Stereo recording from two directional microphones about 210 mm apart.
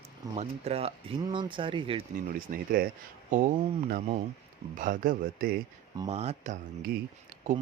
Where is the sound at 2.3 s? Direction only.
45° right (ahead or behind).